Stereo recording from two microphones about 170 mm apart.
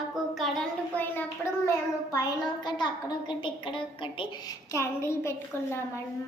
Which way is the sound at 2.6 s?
25° left (ahead or behind).